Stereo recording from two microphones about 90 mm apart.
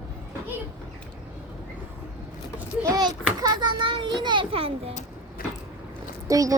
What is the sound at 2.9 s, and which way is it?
Children playing, 50° right (ahead or behind).